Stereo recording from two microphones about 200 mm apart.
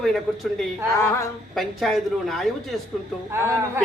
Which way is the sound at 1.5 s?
Centre (ahead or behind).